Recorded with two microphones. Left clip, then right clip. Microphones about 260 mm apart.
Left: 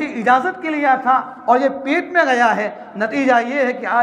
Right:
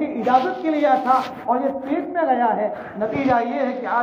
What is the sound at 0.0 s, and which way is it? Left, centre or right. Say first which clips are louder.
A man's voice: left 3 dB; left.